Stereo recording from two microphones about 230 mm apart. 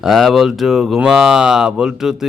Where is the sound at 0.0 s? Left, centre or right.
Centre.